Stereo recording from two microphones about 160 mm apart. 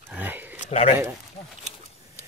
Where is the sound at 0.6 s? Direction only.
40° left (ahead or behind).